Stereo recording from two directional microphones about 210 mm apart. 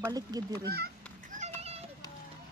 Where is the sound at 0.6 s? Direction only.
50° right (ahead or behind).